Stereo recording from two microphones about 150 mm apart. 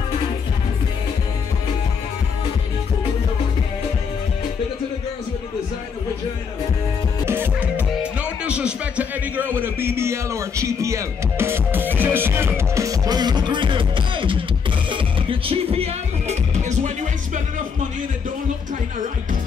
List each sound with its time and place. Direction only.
7.2 s music: 10° right (ahead or behind); by 16.9 s 50° right (ahead or behind)